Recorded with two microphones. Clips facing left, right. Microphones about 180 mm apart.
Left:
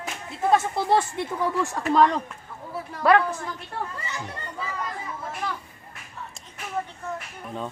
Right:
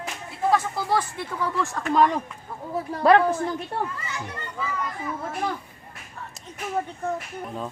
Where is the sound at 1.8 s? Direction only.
Centre (ahead or behind).